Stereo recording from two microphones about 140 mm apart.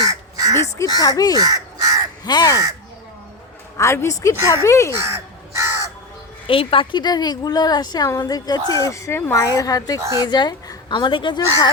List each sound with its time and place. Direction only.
0.1 s crow: 25° right (ahead or behind)
0.9 s a woman's voice: 25° left (ahead or behind)
1.4 s crow: 25° right (ahead or behind)
2.2 s a woman's voice: 30° left (ahead or behind)
3.8 s a woman's voice: 20° left (ahead or behind)
4.9 s crow: 20° right (ahead or behind)
6.5 s a woman's voice: 40° left (ahead or behind)